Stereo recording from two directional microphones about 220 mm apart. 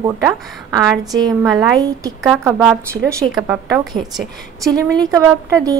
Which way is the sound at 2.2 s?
Centre (ahead or behind).